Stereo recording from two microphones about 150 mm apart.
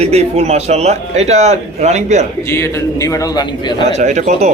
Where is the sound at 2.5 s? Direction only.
20° left (ahead or behind).